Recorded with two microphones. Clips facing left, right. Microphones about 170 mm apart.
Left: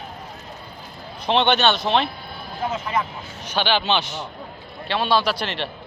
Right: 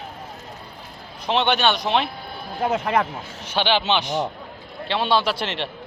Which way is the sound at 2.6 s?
60° right (ahead or behind).